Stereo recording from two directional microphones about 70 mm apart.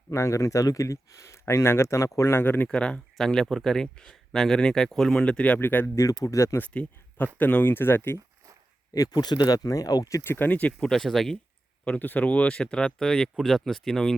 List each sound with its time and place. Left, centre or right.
0.1 s speech: left
2.6 s speech: centre
5.2 s speech: centre
5.5 s speech: left
6.2 s speech: left
6.6 s speech: left
8.9 s speech: left
10.2 s speech: left
10.5 s speech: left
10.8 s speech: centre
11.9 s speech: left; by 14.2 s centre